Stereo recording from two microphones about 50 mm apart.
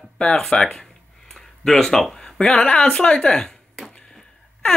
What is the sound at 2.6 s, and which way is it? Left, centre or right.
Speech, centre.